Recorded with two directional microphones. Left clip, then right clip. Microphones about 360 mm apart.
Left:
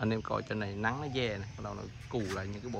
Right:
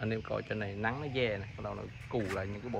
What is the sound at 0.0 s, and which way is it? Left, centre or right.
Speech, centre.